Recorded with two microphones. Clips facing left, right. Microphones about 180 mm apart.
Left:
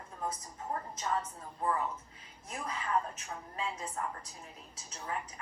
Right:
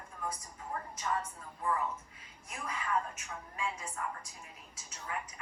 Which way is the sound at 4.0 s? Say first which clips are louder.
Left 2 dB; 35° left (ahead or behind).